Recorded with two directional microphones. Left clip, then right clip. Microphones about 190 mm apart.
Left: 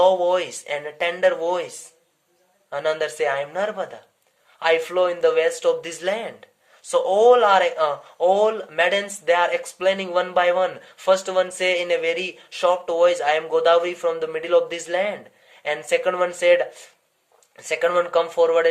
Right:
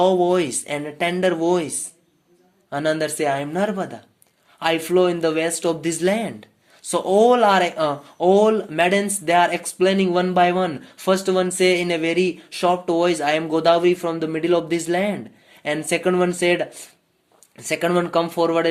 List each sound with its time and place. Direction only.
0.0 s speech: 30° right (ahead or behind)